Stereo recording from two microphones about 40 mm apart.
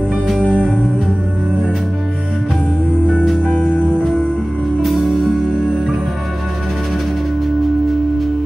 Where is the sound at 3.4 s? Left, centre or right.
Left.